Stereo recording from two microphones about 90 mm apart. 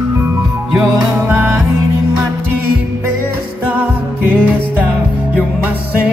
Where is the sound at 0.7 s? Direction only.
15° right (ahead or behind).